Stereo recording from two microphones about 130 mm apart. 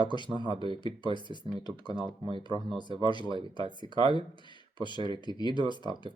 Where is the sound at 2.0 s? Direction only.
40° right (ahead or behind).